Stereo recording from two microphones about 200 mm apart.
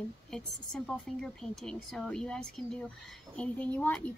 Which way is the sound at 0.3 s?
Centre (ahead or behind).